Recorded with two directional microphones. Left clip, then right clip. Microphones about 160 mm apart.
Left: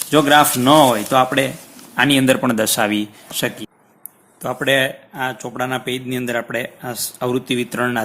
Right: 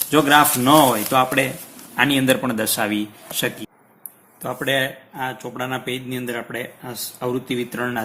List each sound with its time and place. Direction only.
0.1 s speech: 30° left (ahead or behind); by 8.0 s 45° left (ahead or behind)